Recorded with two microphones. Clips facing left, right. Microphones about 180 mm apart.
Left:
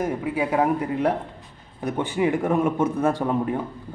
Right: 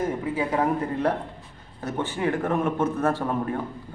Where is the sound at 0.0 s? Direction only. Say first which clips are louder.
Left 2 dB; 15° left (ahead or behind).